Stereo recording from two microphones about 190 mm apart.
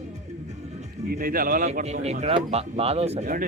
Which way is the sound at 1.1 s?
50° right (ahead or behind).